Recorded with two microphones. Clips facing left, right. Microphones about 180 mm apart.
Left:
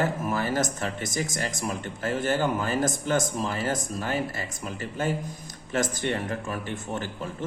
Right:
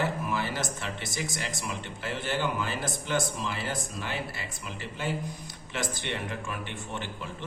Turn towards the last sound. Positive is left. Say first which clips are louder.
# left 5 dB
turn(degrees=40)  # may be behind; listen again after turning